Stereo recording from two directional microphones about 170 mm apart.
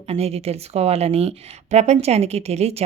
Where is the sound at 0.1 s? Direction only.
35° right (ahead or behind).